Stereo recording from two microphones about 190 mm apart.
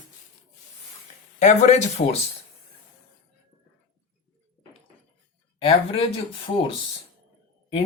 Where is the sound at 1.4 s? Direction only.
35° left (ahead or behind).